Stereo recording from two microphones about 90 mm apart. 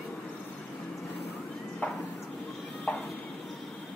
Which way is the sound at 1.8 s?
15° left (ahead or behind).